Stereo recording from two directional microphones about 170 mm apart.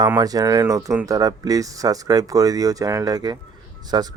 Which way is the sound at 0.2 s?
20° right (ahead or behind).